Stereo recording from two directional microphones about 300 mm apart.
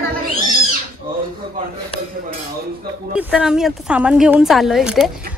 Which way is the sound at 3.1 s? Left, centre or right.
Centre.